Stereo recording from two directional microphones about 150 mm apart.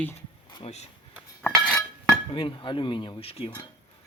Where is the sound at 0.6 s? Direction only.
45° left (ahead or behind).